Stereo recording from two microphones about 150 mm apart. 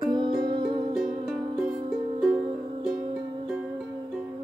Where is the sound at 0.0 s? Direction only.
30° right (ahead or behind).